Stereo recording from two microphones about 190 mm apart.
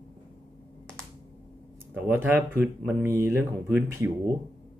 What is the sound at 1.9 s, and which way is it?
Speech, 10° right (ahead or behind).